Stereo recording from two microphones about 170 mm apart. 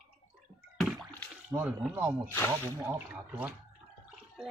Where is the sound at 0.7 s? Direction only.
Centre (ahead or behind).